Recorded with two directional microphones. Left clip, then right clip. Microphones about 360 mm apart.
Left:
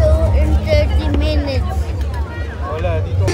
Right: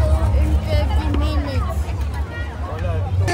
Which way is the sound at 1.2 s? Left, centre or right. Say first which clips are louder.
Left 6 dB; left.